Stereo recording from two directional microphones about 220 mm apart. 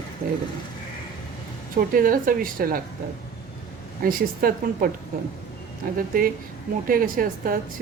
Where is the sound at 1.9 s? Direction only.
40° right (ahead or behind).